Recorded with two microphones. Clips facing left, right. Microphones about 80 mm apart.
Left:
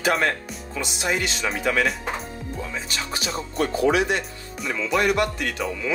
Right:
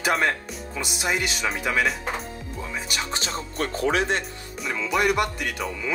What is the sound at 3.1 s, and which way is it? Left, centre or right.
Music, right.